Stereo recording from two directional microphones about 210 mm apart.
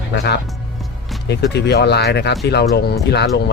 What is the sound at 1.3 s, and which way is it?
Speech, 50° left (ahead or behind).